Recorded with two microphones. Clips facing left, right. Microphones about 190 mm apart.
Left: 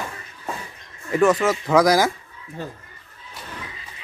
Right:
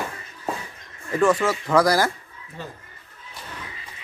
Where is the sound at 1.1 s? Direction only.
10° left (ahead or behind).